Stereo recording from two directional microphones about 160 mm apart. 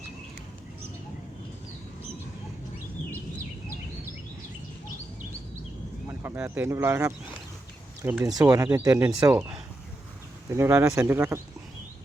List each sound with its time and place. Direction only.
6.1 s speech: 15° right (ahead or behind)
8.2 s speech: 25° right (ahead or behind)
10.5 s speech: 15° right (ahead or behind)